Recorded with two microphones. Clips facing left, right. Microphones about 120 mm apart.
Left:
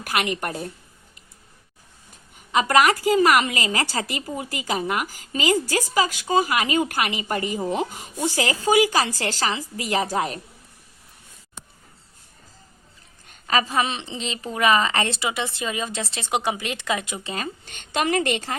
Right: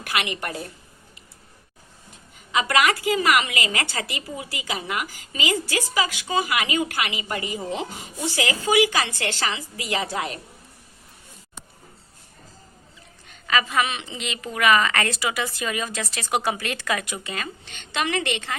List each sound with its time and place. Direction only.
0.0 s a woman's voice: 45° left (ahead or behind)
2.5 s a woman's voice: 40° left (ahead or behind)
13.2 s a woman's voice: 40° left (ahead or behind); by 17.3 s 20° left (ahead or behind)
17.3 s a woman's voice: 40° left (ahead or behind)